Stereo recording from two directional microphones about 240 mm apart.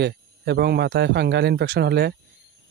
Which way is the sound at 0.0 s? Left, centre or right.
Right.